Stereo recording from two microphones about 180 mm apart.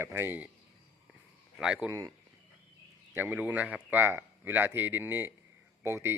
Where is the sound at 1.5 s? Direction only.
5° right (ahead or behind).